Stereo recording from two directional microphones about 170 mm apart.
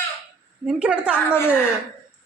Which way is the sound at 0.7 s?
5° right (ahead or behind).